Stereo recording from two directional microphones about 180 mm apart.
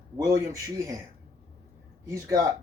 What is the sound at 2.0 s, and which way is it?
Speech, 15° right (ahead or behind).